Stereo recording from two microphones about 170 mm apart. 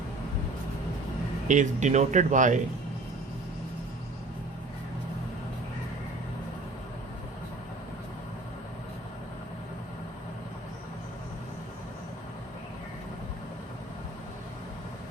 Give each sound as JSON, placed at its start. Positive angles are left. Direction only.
{"t": 1.5, "sound": "speech", "side_deg": -45}